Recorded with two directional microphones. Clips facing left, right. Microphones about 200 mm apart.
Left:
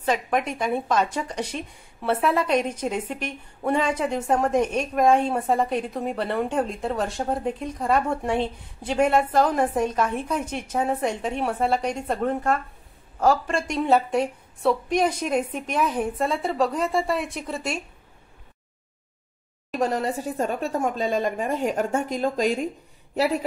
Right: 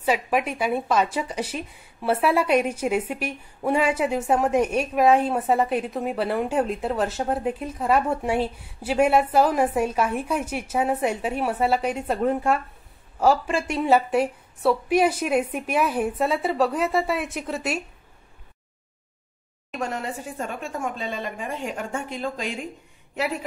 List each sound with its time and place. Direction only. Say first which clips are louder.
0.0 s a woman's voice: right 1 dB; 5° right (ahead or behind)
19.7 s speech: left 5 dB; 35° left (ahead or behind)